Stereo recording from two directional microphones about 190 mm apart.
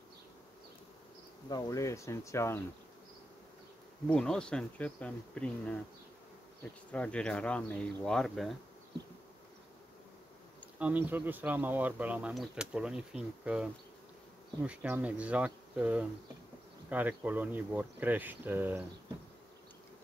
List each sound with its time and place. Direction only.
1.5 s speech: 15° left (ahead or behind)
4.1 s speech: 5° left (ahead or behind)
6.9 s speech: 5° left (ahead or behind)
10.8 s speech: 10° right (ahead or behind)